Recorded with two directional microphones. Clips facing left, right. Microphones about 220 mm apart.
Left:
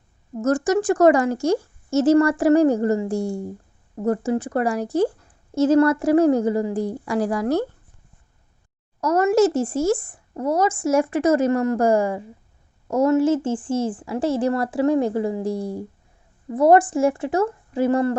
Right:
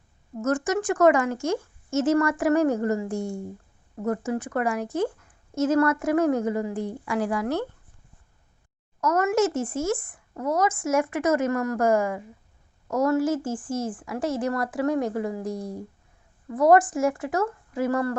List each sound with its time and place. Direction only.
0.3 s a woman's voice: 35° left (ahead or behind)
9.0 s a woman's voice: 30° left (ahead or behind)